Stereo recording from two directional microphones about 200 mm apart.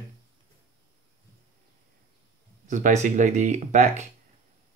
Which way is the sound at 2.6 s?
40° right (ahead or behind).